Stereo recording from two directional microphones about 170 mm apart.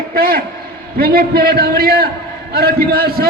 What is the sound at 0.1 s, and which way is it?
A man's voice, 65° right (ahead or behind).